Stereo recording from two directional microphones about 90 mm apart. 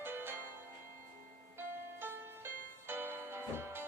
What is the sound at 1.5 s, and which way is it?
Music, 25° right (ahead or behind).